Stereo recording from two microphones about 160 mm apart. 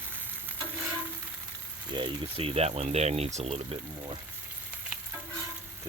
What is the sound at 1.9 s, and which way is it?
Speech, 35° right (ahead or behind).